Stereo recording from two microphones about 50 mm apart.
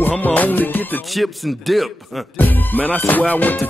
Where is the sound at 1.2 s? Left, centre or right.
Centre.